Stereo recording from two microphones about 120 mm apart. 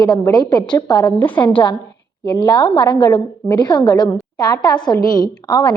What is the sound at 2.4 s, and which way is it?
A woman's voice, 40° left (ahead or behind).